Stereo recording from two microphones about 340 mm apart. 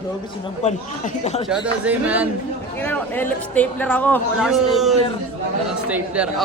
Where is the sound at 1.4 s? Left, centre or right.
Centre.